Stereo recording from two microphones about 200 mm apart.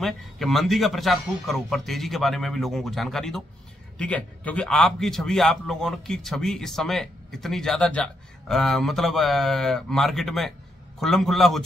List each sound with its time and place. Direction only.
0.0 s a man's voice: centre (ahead or behind)